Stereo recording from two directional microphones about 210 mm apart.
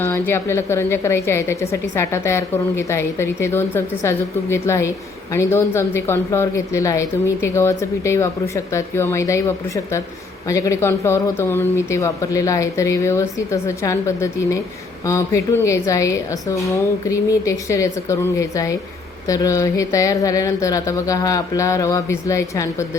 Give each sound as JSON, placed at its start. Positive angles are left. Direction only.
{"t": 0.0, "sound": "a woman's voice", "side_deg": 10}